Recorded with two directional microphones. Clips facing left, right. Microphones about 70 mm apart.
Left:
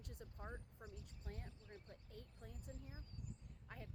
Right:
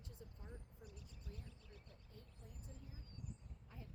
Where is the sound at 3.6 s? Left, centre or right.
Left.